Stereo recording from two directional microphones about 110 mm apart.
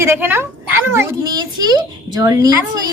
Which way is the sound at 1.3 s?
40° right (ahead or behind).